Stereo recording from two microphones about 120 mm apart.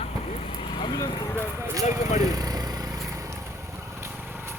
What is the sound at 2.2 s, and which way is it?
Vehicle, 30° right (ahead or behind).